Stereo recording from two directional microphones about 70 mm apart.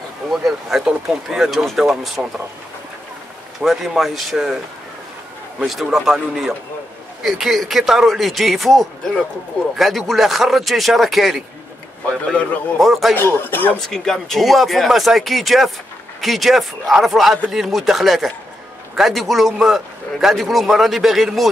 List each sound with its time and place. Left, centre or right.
0.3 s speech: centre
3.6 s a man's voice: centre
5.7 s a man's voice: centre
12.8 s a man's voice: centre
13.1 s speech: left
13.7 s a man's voice: centre